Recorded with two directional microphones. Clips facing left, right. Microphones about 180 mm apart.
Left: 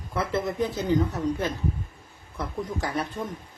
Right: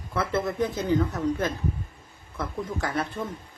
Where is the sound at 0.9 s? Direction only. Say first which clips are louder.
Left 1 dB; 20° left (ahead or behind).